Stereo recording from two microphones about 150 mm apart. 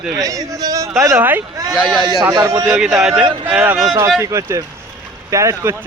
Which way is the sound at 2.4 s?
20° right (ahead or behind).